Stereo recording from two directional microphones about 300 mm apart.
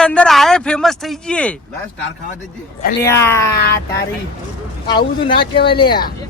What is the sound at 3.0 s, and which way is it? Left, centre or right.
Speech, centre.